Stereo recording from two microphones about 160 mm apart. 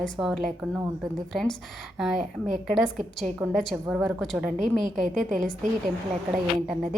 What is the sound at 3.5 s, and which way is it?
Speech, centre (ahead or behind).